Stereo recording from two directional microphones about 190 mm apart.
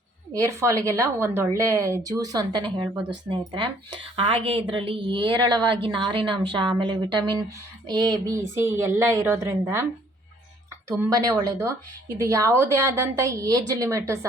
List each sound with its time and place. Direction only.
0.3 s a woman's voice: 15° right (ahead or behind)
10.8 s a woman's voice: 15° right (ahead or behind)